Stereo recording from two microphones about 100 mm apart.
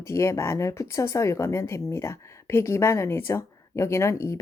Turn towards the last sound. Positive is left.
turn(degrees=30)  # may be behind; listen again after turning